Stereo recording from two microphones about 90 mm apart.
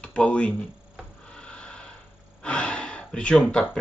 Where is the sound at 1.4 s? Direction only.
10° left (ahead or behind).